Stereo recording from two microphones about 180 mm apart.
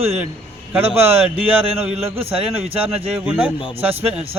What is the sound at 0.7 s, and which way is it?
Speech, 10° right (ahead or behind).